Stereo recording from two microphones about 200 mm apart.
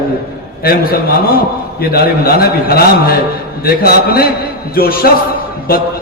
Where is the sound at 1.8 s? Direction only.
50° left (ahead or behind).